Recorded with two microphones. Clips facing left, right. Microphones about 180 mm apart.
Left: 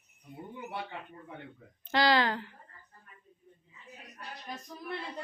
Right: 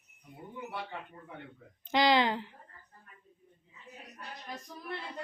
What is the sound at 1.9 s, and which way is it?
Speech, 20° right (ahead or behind).